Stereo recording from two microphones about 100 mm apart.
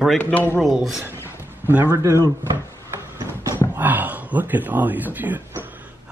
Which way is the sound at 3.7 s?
15° right (ahead or behind).